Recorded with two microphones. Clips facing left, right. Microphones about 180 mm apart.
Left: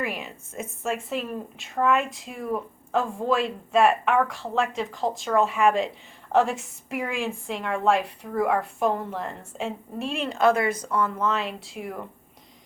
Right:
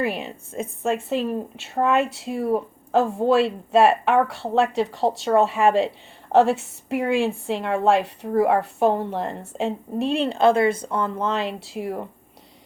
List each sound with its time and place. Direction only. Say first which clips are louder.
0.0 s a woman's voice: right 5 dB; 35° right (ahead or behind)